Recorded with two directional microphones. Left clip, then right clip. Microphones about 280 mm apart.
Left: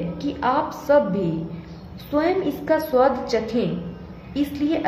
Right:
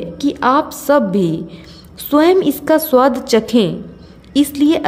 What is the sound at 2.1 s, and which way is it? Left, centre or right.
A woman's voice, right.